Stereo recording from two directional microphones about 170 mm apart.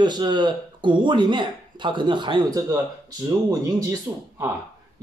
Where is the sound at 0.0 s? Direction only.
25° right (ahead or behind).